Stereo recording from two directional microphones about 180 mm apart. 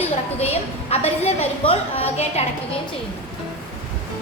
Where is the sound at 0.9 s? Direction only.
35° left (ahead or behind).